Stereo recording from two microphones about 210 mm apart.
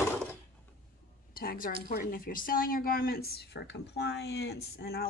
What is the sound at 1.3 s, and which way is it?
A woman's voice, 45° left (ahead or behind).